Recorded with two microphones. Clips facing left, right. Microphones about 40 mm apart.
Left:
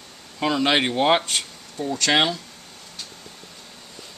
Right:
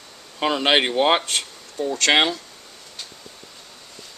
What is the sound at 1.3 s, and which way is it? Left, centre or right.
Speech, centre.